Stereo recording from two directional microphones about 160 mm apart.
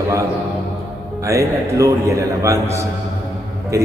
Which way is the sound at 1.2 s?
20° right (ahead or behind).